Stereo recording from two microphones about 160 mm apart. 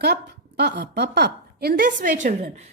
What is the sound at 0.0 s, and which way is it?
A woman's voice, 90° right.